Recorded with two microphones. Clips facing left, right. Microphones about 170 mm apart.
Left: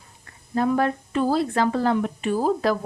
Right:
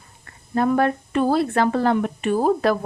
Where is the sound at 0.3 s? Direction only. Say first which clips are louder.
Right 2 dB; 60° right (ahead or behind).